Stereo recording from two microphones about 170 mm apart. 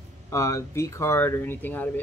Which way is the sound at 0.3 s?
20° left (ahead or behind).